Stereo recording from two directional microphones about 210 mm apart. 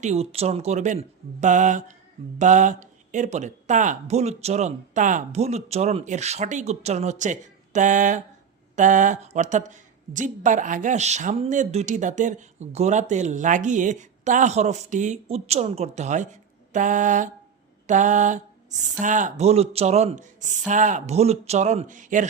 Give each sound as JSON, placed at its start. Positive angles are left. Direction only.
{"t": 0.0, "sound": "a woman's voice", "side_deg": -30}